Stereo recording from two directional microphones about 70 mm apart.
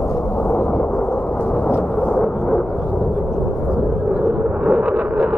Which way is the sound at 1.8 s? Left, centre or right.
Centre.